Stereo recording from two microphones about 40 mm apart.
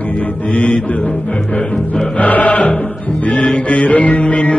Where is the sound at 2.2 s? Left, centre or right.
Left.